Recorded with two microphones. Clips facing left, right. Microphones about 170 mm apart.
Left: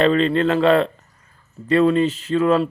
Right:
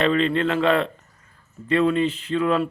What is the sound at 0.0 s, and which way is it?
A man's voice, 35° left (ahead or behind).